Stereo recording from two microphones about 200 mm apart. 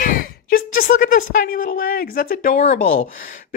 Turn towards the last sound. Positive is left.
turn(degrees=40)  # may be behind; listen again after turning